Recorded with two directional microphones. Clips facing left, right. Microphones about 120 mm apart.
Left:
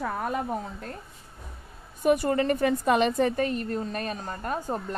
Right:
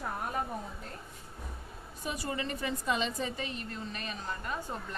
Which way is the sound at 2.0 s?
55° left (ahead or behind).